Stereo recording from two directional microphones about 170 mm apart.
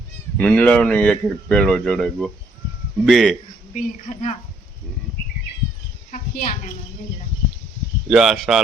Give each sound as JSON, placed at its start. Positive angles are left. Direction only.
{"t": 0.3, "sound": "speech", "side_deg": 10}
{"t": 3.8, "sound": "a woman's voice", "side_deg": 45}
{"t": 6.1, "sound": "a sound", "side_deg": 55}
{"t": 8.0, "sound": "speech", "side_deg": 0}